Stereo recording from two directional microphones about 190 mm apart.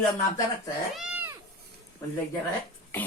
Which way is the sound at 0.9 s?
5° right (ahead or behind).